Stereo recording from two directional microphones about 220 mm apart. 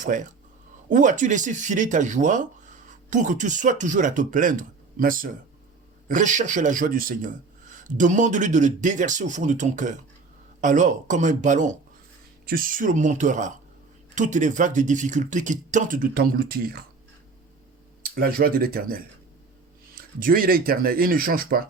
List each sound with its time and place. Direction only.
0.0 s speech: 35° right (ahead or behind)
18.0 s speech: 40° right (ahead or behind)
20.0 s speech: 40° right (ahead or behind)